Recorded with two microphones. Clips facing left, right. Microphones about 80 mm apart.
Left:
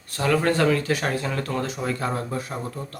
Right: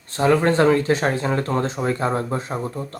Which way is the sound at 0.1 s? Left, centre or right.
Right.